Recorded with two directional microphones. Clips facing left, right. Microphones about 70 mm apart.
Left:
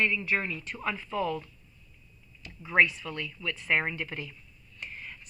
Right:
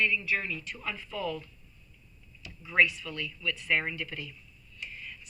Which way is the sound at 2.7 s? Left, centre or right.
Left.